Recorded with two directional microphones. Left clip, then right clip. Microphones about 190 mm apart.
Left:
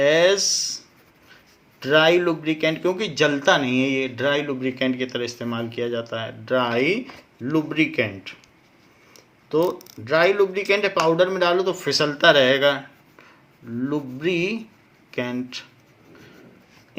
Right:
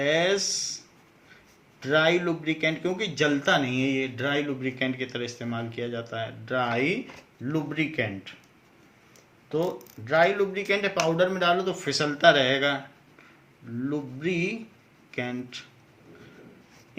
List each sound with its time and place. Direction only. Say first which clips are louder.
0.0 s a man's voice: left 7 dB; 45° left (ahead or behind)
1.8 s a man's voice: left 6 dB; 50° left (ahead or behind)
10.0 s a man's voice: left 4 dB; 40° left (ahead or behind)
13.8 s a man's voice: left 5 dB; 45° left (ahead or behind)